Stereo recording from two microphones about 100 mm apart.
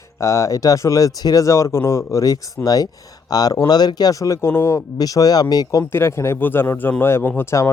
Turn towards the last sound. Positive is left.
turn(degrees=25)  # may be behind; listen again after turning